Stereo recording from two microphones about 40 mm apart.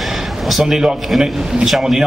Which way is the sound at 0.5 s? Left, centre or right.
Centre.